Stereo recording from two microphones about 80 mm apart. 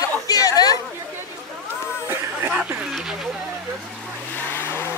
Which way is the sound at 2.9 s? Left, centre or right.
Centre.